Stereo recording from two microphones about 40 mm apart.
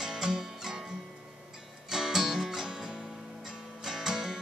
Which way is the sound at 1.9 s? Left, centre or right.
Centre.